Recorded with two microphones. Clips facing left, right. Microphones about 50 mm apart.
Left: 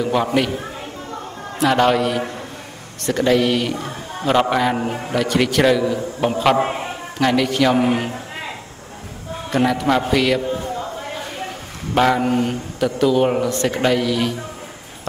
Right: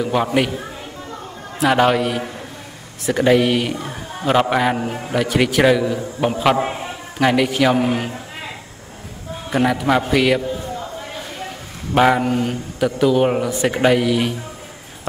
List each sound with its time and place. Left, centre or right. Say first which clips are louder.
0.0 s a man's voice: even; centre
1.6 s a man's voice: even; centre
4.7 s a man's voice: left 1 dB; centre
5.1 s a man's voice: right 1 dB; centre
6.6 s a man's voice: left 2 dB; centre
7.2 s a man's voice: right 1 dB; centre
7.7 s a man's voice: left 1 dB; centre
9.5 s a man's voice: even; centre
10.5 s a sound: left 2 dB; left
11.9 s a sound: right 2 dB; centre
12.2 s a man's voice: left 1 dB; centre